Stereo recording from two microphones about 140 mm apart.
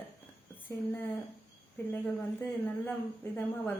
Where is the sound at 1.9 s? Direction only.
15° left (ahead or behind).